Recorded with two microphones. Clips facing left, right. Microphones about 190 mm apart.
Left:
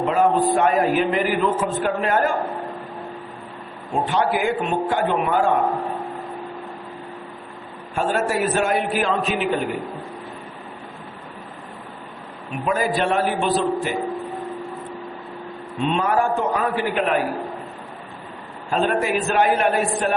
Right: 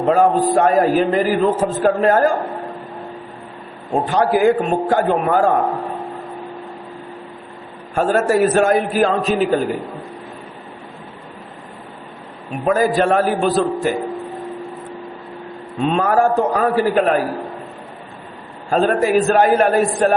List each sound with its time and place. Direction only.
0.0 s a man's voice: 40° right (ahead or behind)
4.0 s a man's voice: 40° right (ahead or behind)
7.9 s a man's voice: 45° right (ahead or behind)
12.6 s a man's voice: 40° right (ahead or behind)
15.8 s a man's voice: 40° right (ahead or behind)
18.7 s a man's voice: 40° right (ahead or behind)